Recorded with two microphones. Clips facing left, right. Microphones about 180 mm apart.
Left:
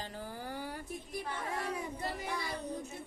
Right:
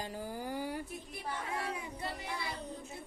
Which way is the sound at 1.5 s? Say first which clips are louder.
Left 1 dB; 40° left (ahead or behind).